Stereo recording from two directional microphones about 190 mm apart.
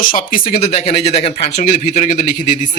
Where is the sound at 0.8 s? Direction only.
35° left (ahead or behind).